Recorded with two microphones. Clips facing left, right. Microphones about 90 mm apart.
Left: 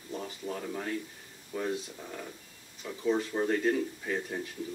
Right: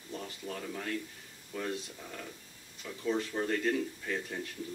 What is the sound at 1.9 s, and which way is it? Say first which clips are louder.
Speech: left 3 dB; 10° left (ahead or behind).